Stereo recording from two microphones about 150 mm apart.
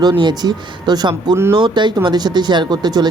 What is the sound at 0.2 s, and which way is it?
Speech, 30° right (ahead or behind).